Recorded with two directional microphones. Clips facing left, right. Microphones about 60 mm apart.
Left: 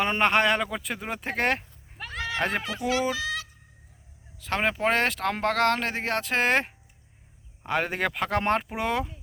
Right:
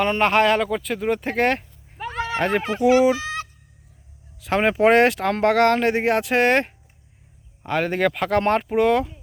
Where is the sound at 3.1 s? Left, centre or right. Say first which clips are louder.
Right 7 dB; right.